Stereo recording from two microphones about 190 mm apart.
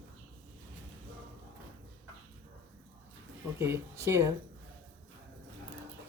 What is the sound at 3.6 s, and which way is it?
Speech, 15° right (ahead or behind).